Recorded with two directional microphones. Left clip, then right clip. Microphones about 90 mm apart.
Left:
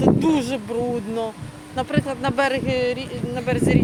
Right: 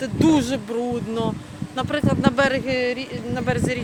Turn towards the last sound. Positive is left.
turn(degrees=-30)  # may be behind; listen again after turning